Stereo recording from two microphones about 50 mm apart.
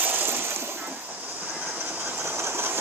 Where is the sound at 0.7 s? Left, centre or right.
Right.